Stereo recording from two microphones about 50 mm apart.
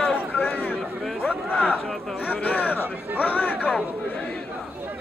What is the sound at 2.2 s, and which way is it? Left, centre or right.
Speech, left.